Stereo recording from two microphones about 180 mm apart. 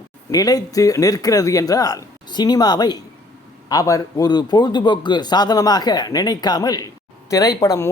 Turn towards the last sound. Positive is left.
turn(degrees=15)  # may be behind; listen again after turning